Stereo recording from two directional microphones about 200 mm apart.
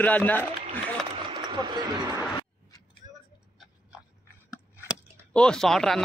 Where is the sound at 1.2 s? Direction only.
25° right (ahead or behind).